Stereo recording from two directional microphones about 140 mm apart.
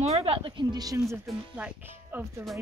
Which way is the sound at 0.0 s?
45° right (ahead or behind).